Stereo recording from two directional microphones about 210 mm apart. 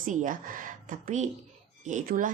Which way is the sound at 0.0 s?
40° right (ahead or behind).